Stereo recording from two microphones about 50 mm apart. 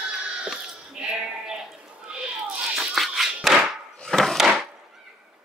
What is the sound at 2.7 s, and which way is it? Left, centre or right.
Music, centre.